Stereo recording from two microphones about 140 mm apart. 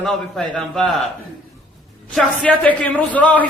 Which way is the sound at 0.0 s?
5° left (ahead or behind).